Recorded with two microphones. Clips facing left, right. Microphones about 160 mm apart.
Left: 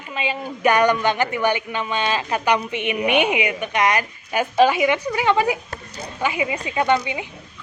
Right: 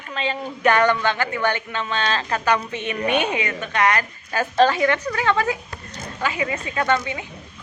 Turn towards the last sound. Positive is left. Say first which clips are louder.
# left 2 dB
turn(degrees=15)  # may be behind; listen again after turning